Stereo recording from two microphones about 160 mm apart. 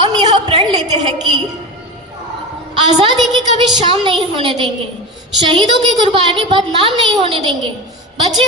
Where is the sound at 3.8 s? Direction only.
30° right (ahead or behind).